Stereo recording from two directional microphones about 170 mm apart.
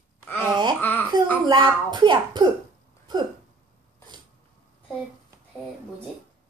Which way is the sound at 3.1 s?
25° right (ahead or behind).